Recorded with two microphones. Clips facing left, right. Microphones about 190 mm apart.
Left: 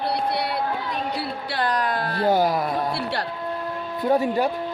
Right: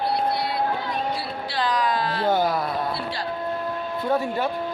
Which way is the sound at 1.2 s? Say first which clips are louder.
Left 1 dB; 60° left (ahead or behind).